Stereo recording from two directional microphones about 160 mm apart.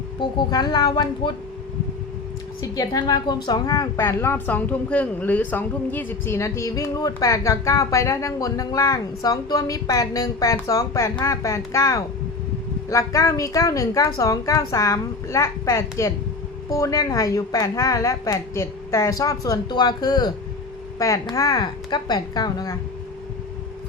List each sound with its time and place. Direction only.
0.2 s a woman's voice: 30° left (ahead or behind)
2.6 s a woman's voice: 20° left (ahead or behind)